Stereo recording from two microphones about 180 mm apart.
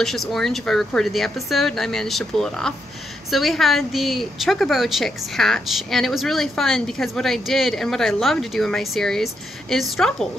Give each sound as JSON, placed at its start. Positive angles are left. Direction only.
{"t": 0.0, "sound": "a woman's voice", "side_deg": 0}